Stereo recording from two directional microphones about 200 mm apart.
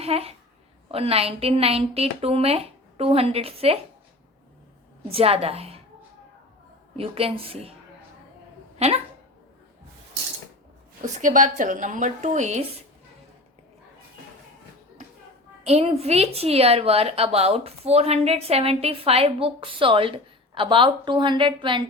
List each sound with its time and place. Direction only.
0.0 s a woman's voice: 30° right (ahead or behind)
5.0 s a woman's voice: 30° right (ahead or behind)
6.9 s a woman's voice: 30° right (ahead or behind)
8.8 s speech: 30° right (ahead or behind)
11.0 s speech: 40° right (ahead or behind)
15.6 s a woman's voice: 30° right (ahead or behind)